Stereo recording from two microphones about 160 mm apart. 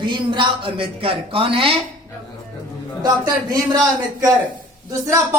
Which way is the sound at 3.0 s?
25° right (ahead or behind).